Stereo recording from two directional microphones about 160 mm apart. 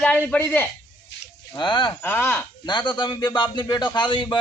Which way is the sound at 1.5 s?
30° left (ahead or behind).